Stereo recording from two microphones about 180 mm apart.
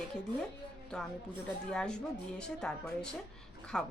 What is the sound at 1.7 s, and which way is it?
Speech, 5° left (ahead or behind).